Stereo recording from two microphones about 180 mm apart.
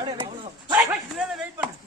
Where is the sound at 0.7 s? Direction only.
5° right (ahead or behind).